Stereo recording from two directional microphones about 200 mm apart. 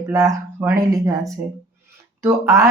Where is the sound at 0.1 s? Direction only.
15° right (ahead or behind).